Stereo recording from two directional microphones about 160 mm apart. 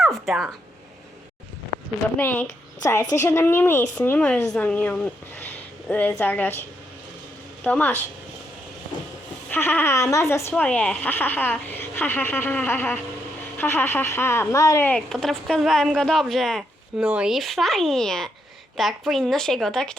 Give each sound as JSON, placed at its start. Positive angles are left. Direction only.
{"t": 0.0, "sound": "a sound", "side_deg": 0}
{"t": 2.1, "sound": "speech", "side_deg": 10}
{"t": 7.6, "sound": "speech", "side_deg": 10}
{"t": 9.5, "sound": "speech", "side_deg": 15}
{"t": 14.8, "sound": "speech", "side_deg": 5}